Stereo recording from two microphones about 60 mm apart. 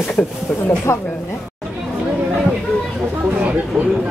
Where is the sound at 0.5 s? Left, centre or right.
Left.